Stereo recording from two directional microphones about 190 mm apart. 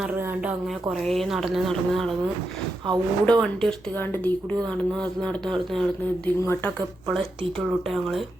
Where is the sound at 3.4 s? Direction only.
5° left (ahead or behind).